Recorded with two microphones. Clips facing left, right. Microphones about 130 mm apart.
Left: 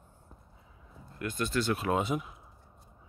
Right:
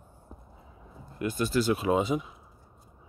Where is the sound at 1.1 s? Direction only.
10° right (ahead or behind).